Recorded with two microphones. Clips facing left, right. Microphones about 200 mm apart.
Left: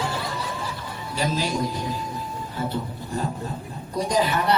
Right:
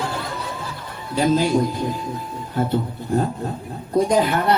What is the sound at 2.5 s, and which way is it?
Speech, 55° right (ahead or behind).